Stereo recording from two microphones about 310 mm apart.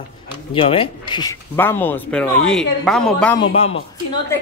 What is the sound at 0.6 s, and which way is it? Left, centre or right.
Speech, centre.